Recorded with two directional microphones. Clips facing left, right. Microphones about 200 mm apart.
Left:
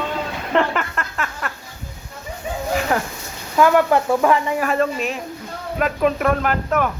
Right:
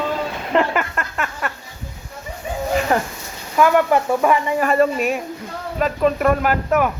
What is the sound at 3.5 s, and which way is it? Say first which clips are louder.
Speech: even; 10° right (ahead or behind).